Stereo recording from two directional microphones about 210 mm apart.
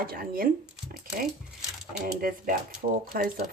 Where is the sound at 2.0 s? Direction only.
45° right (ahead or behind).